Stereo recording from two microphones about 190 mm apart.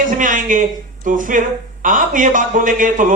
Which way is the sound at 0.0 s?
45° right (ahead or behind).